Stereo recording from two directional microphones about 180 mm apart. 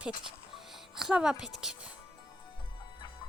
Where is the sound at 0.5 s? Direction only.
Centre (ahead or behind).